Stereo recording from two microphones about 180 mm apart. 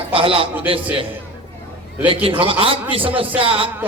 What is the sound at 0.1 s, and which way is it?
Speech, 30° right (ahead or behind).